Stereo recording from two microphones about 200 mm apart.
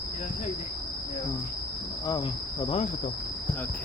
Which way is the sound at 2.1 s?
20° left (ahead or behind).